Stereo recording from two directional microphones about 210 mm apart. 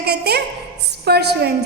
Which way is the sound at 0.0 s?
50° right (ahead or behind).